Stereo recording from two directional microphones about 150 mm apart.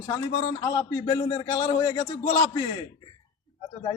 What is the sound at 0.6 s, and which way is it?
A man's voice, 25° left (ahead or behind).